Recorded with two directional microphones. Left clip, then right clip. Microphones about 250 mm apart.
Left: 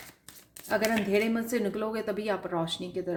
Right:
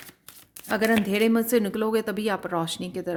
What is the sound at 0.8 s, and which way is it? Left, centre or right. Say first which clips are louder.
Speech: right 6 dB; right.